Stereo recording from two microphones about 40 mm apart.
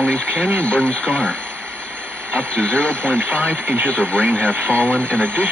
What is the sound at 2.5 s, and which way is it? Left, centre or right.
Speech, left.